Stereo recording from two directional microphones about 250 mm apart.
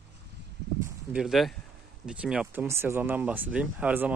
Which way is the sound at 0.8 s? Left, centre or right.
Centre.